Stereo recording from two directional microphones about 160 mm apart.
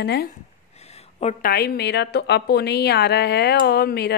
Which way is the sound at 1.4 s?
75° left (ahead or behind).